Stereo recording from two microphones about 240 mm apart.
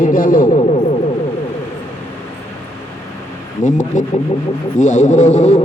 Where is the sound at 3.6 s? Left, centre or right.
Left.